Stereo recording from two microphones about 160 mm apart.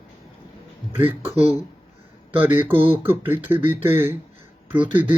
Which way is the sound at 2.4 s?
15° right (ahead or behind).